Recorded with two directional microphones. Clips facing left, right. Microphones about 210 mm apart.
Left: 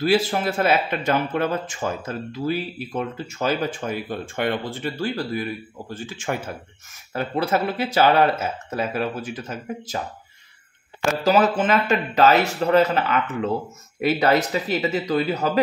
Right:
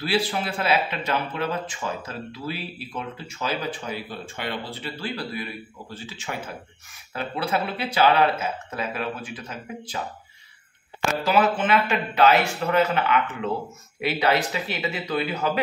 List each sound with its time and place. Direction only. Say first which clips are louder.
0.0 s speech: left 5 dB; 45° left (ahead or behind)
11.2 s speech: left 3 dB; 40° left (ahead or behind)